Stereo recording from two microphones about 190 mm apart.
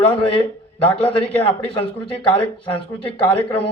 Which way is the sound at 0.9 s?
30° left (ahead or behind).